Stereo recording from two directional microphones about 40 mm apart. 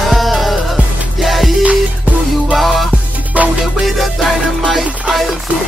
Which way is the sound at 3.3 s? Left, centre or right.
Right.